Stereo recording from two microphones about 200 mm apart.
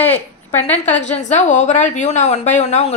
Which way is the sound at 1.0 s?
35° left (ahead or behind).